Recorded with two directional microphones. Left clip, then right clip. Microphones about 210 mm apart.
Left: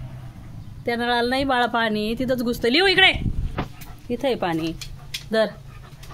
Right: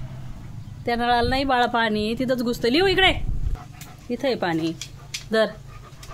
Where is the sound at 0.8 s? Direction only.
Centre (ahead or behind).